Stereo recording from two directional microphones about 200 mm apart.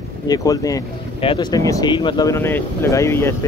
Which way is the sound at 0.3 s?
20° left (ahead or behind).